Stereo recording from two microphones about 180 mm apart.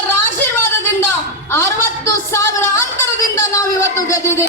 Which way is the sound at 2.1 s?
15° left (ahead or behind).